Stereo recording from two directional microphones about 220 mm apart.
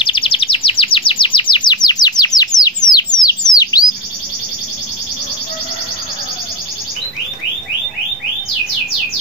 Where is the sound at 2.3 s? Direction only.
15° left (ahead or behind).